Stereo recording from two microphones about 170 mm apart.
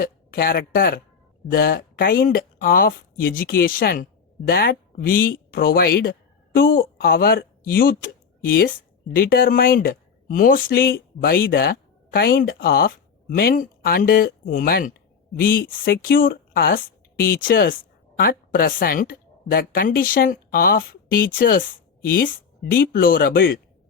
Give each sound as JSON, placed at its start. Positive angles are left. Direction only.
{"t": 0.0, "sound": "a woman's voice", "side_deg": 60}